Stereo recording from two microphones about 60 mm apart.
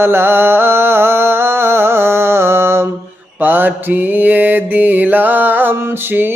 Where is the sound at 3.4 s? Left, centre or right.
Right.